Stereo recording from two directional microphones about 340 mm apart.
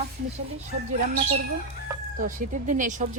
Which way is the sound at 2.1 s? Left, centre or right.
Right.